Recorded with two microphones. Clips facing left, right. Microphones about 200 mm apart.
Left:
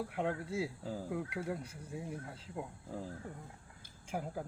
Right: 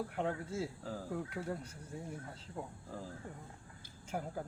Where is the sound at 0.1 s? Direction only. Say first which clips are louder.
Left 1 dB; 5° left (ahead or behind).